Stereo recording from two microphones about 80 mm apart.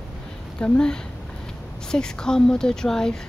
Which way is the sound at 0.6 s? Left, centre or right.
Centre.